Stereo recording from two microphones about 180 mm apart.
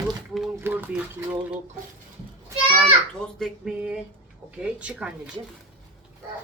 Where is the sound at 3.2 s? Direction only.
Centre (ahead or behind).